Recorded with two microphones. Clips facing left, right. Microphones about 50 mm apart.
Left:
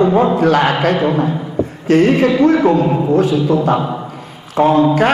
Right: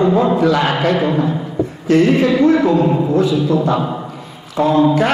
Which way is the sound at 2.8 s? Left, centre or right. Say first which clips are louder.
Even; left.